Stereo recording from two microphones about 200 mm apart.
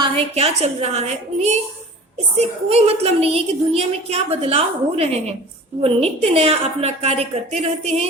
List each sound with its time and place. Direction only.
0.0 s a woman's voice: 30° right (ahead or behind)